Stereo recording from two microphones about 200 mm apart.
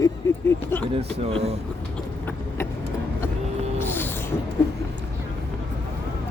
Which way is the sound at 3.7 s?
10° left (ahead or behind).